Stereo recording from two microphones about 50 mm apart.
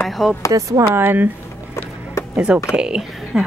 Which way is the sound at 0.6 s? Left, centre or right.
Right.